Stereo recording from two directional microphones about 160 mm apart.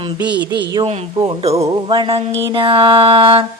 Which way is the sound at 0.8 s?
40° right (ahead or behind).